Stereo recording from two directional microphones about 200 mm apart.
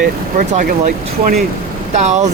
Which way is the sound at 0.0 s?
40° right (ahead or behind).